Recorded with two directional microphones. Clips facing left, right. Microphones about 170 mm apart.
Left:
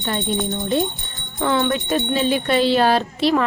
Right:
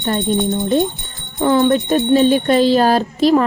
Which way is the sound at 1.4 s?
35° right (ahead or behind).